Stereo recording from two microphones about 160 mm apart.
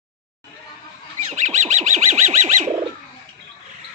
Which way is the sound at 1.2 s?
50° right (ahead or behind).